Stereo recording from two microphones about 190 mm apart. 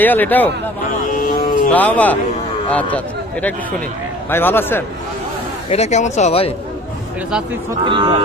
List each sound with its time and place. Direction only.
0.0 s speech: 10° left (ahead or behind)
1.1 s vehicle: 50° left (ahead or behind)
1.7 s speech: 10° left (ahead or behind)
4.3 s speech: 10° left (ahead or behind)
5.7 s speech: 35° left (ahead or behind)
7.9 s speech: 25° right (ahead or behind)